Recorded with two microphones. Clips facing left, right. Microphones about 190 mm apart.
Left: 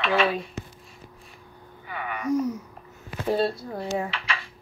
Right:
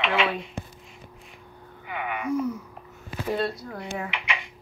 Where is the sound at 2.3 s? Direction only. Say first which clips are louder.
Left 2 dB; 40° left (ahead or behind).